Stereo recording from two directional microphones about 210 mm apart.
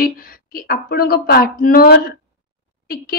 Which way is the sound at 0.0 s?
45° left (ahead or behind).